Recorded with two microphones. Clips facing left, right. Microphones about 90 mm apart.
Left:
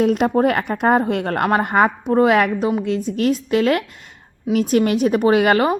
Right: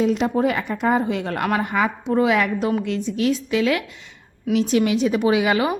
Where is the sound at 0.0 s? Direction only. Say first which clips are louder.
Left 3 dB; 50° left (ahead or behind).